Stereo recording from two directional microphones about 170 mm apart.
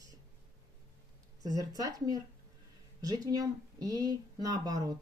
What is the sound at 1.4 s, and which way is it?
Speech, 20° right (ahead or behind).